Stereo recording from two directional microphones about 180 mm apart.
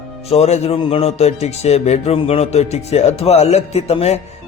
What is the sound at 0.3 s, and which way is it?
Speech, 35° left (ahead or behind).